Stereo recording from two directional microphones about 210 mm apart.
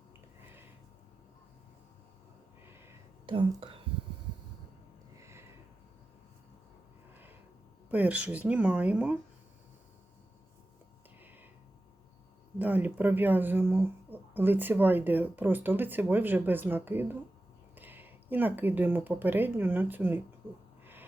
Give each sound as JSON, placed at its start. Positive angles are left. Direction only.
{"t": 3.2, "sound": "speech", "side_deg": -25}
{"t": 5.1, "sound": "a sound", "side_deg": -15}
{"t": 7.9, "sound": "speech", "side_deg": -5}
{"t": 12.5, "sound": "speech", "side_deg": -10}